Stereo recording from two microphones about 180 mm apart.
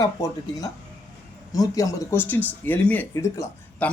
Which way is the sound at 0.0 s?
20° left (ahead or behind).